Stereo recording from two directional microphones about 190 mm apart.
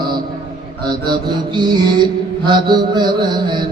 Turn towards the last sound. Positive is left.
turn(degrees=-20)  # may be behind; listen again after turning